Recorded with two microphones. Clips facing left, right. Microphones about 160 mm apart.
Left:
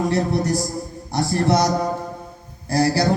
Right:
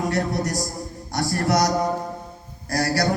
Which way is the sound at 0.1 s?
30° left (ahead or behind).